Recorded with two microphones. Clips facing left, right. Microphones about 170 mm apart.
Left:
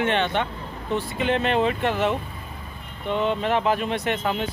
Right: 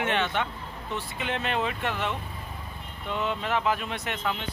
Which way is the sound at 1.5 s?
35° left (ahead or behind).